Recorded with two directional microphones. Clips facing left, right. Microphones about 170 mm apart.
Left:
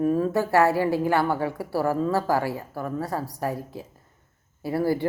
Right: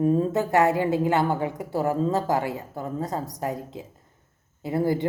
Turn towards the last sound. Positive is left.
turn(degrees=-20)  # may be behind; listen again after turning